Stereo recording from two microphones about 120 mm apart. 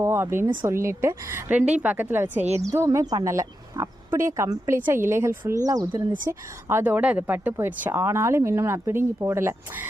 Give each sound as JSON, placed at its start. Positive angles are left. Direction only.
{"t": 0.0, "sound": "a woman's voice", "side_deg": -20}
{"t": 2.6, "sound": "speech", "side_deg": -25}
{"t": 6.2, "sound": "speech", "side_deg": -20}